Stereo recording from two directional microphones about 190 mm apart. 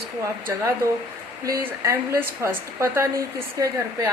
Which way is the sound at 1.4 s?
15° right (ahead or behind).